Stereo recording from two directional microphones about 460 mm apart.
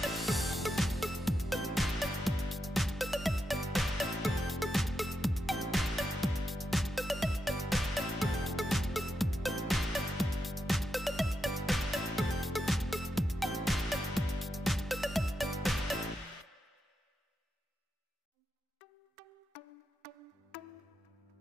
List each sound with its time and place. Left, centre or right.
0.0 s music: centre